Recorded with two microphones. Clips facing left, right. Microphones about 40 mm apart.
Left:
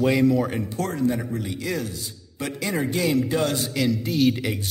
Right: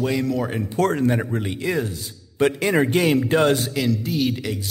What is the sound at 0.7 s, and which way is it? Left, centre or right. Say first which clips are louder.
Speech: right 6 dB; right.